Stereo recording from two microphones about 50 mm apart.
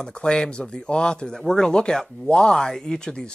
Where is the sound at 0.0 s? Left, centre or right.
Centre.